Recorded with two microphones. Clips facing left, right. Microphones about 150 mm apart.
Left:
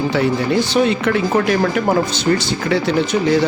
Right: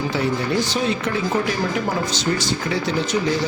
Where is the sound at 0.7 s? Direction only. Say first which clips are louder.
Left 7 dB; 65° left (ahead or behind).